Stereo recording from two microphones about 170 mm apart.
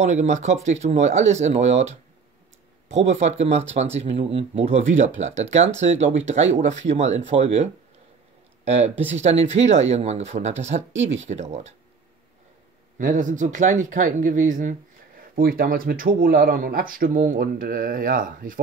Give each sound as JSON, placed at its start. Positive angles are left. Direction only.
{"t": 0.0, "sound": "speech", "side_deg": -45}
{"t": 3.0, "sound": "speech", "side_deg": -40}
{"t": 9.1, "sound": "speech", "side_deg": -40}
{"t": 10.9, "sound": "speech", "side_deg": -90}
{"t": 11.1, "sound": "speech", "side_deg": -40}
{"t": 12.9, "sound": "speech", "side_deg": -50}